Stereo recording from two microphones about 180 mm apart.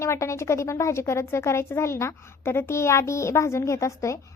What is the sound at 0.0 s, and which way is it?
Speech, 15° left (ahead or behind).